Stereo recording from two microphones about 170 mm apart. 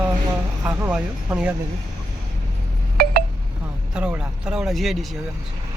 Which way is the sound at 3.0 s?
65° right (ahead or behind).